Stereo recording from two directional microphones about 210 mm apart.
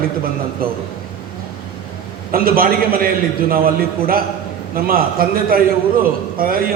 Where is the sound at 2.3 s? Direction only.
45° right (ahead or behind).